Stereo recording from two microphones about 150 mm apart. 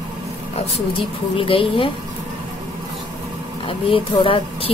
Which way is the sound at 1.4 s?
35° left (ahead or behind).